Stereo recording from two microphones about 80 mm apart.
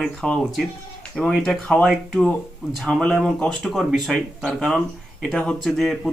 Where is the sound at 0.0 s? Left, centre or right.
Centre.